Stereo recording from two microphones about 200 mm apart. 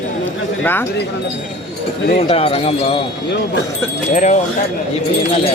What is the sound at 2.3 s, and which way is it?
Speech, 30° left (ahead or behind).